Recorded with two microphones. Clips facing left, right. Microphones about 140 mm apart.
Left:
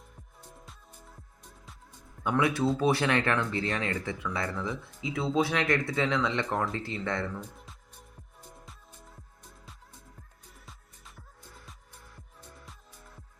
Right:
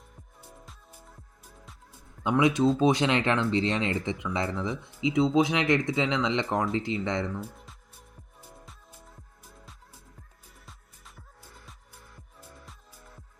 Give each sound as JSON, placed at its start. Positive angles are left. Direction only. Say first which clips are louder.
{"t": 0.6, "sound": "music", "louder": "right 1 dB", "side_deg": 0}
{"t": 2.2, "sound": "speech", "louder": "right 4 dB", "side_deg": -20}
{"t": 8.4, "sound": "music", "louder": "right 1 dB", "side_deg": 0}
{"t": 10.7, "sound": "music", "louder": "right 1 dB", "side_deg": 0}